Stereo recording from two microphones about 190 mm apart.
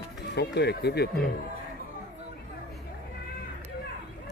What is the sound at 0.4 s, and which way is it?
Speech, 60° left (ahead or behind).